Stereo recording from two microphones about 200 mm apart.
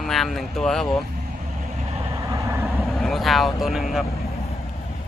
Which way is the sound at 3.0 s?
Centre (ahead or behind).